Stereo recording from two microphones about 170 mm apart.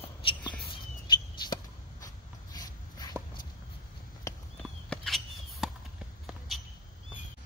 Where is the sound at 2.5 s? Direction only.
25° left (ahead or behind).